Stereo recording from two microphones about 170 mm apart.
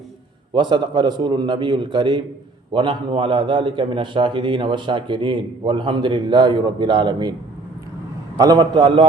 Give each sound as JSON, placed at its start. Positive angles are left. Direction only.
{"t": 0.5, "sound": "a man's voice", "side_deg": -25}
{"t": 8.4, "sound": "a man's voice", "side_deg": -25}